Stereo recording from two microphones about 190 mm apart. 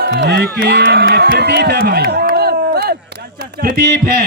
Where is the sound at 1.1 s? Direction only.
60° right (ahead or behind).